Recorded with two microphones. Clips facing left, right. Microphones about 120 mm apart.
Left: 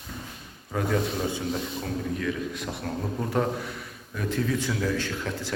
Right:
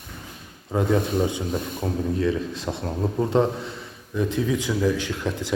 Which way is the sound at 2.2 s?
30° right (ahead or behind).